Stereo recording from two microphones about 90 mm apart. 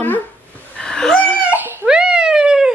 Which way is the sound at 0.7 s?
10° left (ahead or behind).